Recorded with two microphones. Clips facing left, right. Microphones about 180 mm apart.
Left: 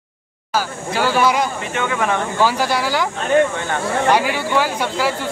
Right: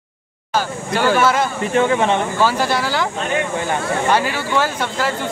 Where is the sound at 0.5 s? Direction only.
5° left (ahead or behind).